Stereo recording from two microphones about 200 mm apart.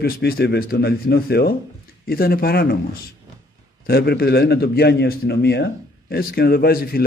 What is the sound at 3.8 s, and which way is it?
A man's voice, 50° left (ahead or behind).